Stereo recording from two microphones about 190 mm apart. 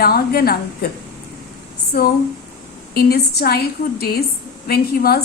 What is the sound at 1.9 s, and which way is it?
A woman's voice, 55° left (ahead or behind).